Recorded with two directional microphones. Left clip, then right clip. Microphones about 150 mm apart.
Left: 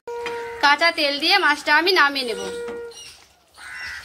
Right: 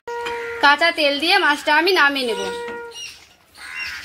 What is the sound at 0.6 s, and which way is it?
A woman's voice, 25° right (ahead or behind).